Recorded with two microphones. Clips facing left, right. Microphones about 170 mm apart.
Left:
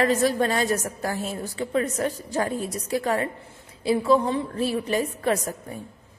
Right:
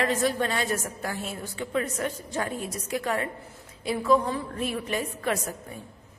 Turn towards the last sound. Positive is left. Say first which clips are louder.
# left 4 dB
turn(degrees=35)  # may be behind; listen again after turning